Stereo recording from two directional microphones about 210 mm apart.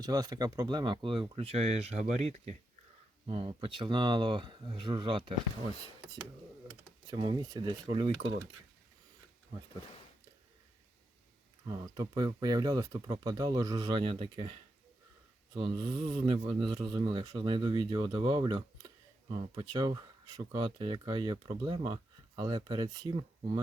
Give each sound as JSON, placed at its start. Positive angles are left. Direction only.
{"t": 0.0, "sound": "speech", "side_deg": -20}
{"t": 7.1, "sound": "speech", "side_deg": -20}
{"t": 11.7, "sound": "speech", "side_deg": -20}
{"t": 15.5, "sound": "speech", "side_deg": -25}